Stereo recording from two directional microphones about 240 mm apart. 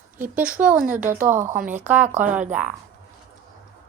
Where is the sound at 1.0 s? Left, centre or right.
Right.